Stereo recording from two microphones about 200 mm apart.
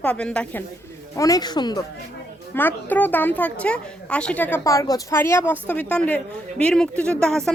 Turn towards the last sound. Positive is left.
turn(degrees=5)  # may be behind; listen again after turning